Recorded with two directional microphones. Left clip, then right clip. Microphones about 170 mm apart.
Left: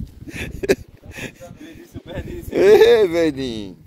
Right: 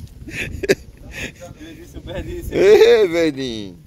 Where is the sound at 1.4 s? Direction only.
Centre (ahead or behind).